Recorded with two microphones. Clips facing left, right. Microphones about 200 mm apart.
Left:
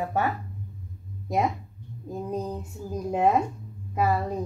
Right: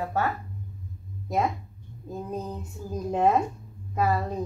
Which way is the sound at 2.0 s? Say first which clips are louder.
Left 2 dB; 15° left (ahead or behind).